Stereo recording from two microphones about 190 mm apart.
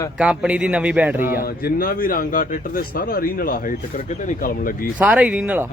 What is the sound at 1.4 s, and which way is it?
Speech, 50° left (ahead or behind).